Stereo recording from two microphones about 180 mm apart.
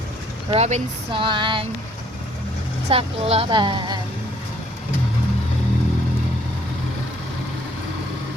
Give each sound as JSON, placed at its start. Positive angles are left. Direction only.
{"t": 0.5, "sound": "speech", "side_deg": -35}
{"t": 2.9, "sound": "speech", "side_deg": -35}